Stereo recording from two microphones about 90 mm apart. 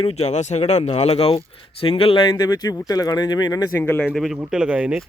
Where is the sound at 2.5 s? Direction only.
45° left (ahead or behind).